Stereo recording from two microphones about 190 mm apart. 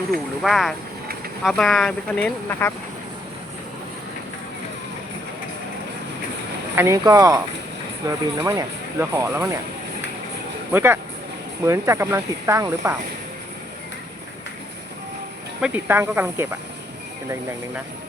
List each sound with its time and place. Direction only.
0.4 s speech: centre (ahead or behind)
6.7 s speech: 15° right (ahead or behind)
10.7 s speech: 10° right (ahead or behind)
15.6 s speech: 10° right (ahead or behind)